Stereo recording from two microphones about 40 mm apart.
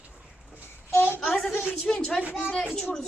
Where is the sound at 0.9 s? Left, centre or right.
Left.